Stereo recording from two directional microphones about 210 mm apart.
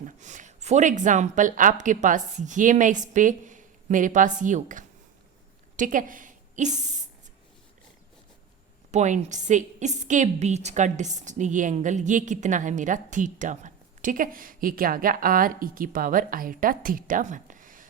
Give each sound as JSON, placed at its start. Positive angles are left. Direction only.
{"t": 0.0, "sound": "a woman's voice", "side_deg": -35}
{"t": 8.9, "sound": "a woman's voice", "side_deg": -35}